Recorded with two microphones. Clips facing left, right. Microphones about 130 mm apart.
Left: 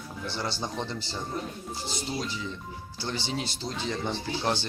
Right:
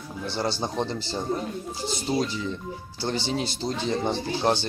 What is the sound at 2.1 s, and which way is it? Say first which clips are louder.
Speech: right 9 dB; 55° right (ahead or behind).